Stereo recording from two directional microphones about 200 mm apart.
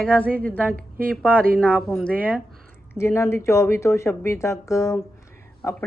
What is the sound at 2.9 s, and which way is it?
Speech, 10° left (ahead or behind).